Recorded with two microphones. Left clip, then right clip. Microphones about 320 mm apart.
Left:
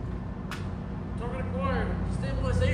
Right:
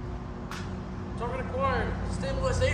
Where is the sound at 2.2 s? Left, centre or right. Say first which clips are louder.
Right 4 dB; centre.